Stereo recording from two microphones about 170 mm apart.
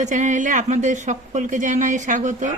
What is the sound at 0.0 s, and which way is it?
Speech, 45° right (ahead or behind).